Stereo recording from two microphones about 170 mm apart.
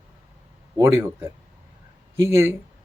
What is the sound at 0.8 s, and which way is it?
Speech, 15° right (ahead or behind).